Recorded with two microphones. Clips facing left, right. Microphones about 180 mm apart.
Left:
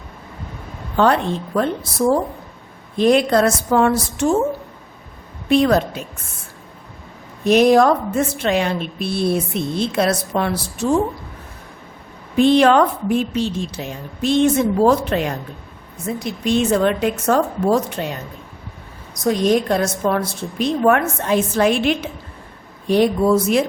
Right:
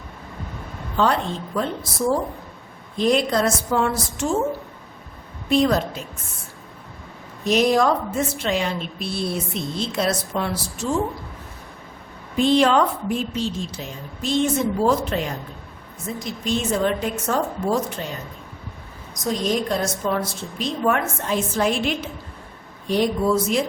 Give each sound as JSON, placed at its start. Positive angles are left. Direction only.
{"t": 0.9, "sound": "speech", "side_deg": 60}
{"t": 5.5, "sound": "speech", "side_deg": 60}
{"t": 7.4, "sound": "speech", "side_deg": 60}
{"t": 12.4, "sound": "a woman's voice", "side_deg": 60}
{"t": 19.2, "sound": "speech", "side_deg": 60}